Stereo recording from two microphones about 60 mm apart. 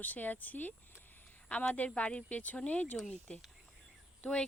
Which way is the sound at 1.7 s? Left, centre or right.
Left.